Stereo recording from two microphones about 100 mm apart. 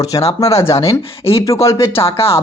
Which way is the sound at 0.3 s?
30° left (ahead or behind).